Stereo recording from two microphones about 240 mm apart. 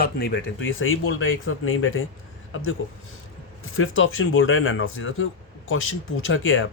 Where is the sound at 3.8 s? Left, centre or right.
Left.